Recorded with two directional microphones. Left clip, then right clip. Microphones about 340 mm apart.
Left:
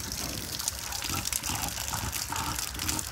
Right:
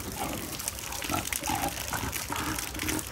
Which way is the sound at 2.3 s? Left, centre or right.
Centre.